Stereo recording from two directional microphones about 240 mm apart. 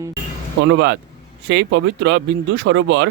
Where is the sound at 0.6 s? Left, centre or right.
Right.